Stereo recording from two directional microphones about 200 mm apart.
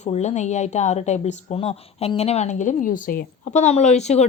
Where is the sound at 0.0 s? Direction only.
35° left (ahead or behind).